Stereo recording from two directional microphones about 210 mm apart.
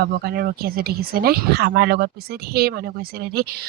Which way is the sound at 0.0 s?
45° right (ahead or behind).